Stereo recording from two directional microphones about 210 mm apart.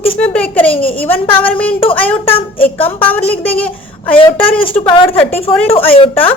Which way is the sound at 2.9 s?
10° left (ahead or behind).